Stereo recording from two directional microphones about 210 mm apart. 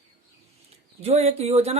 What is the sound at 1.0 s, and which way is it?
Speech, 30° right (ahead or behind).